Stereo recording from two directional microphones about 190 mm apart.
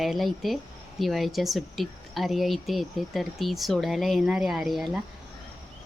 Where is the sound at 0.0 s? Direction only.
Centre (ahead or behind).